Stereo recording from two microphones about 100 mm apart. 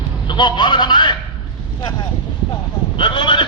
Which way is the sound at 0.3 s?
50° left (ahead or behind).